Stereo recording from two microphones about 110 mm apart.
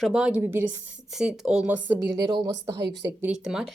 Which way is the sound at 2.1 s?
45° right (ahead or behind).